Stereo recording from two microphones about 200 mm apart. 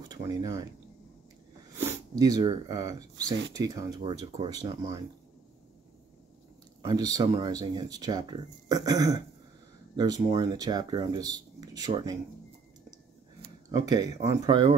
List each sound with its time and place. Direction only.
0.1 s speech: 20° right (ahead or behind)
1.8 s speech: 15° right (ahead or behind)
6.8 s speech: 20° right (ahead or behind)
10.3 s speech: 20° right (ahead or behind)
13.7 s speech: 20° right (ahead or behind)